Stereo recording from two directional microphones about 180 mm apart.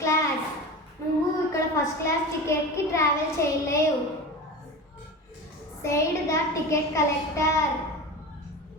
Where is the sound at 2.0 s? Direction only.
15° left (ahead or behind).